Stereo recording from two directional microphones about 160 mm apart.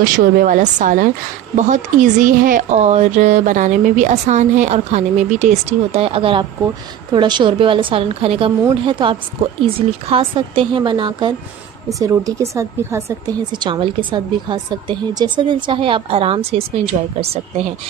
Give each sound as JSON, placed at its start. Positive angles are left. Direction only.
{"t": 0.0, "sound": "a woman's voice", "side_deg": -60}